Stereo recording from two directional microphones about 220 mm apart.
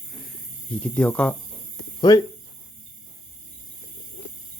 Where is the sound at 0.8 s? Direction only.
5° left (ahead or behind).